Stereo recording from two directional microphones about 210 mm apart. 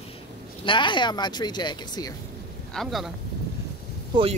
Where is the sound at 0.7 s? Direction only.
20° left (ahead or behind).